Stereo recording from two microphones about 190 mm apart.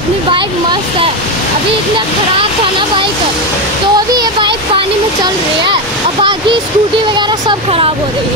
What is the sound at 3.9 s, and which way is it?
Speech, 20° right (ahead or behind).